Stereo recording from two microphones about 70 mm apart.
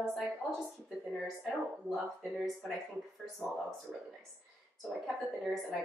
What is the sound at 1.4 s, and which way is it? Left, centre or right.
Speech, centre.